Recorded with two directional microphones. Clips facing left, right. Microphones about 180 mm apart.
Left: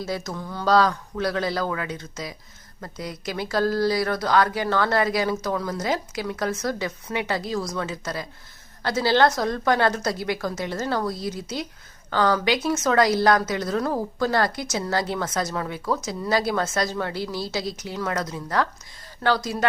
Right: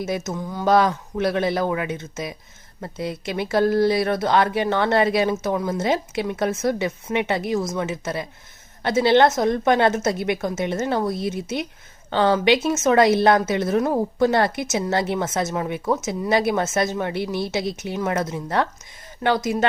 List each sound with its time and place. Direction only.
0.0 s a woman's voice: 20° right (ahead or behind)